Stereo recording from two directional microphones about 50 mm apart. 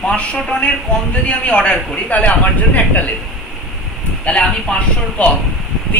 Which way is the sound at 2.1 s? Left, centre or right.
Left.